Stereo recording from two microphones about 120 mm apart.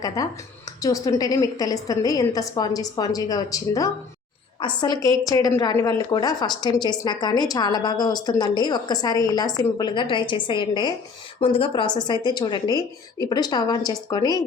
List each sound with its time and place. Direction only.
0.2 s a woman's voice: 30° left (ahead or behind)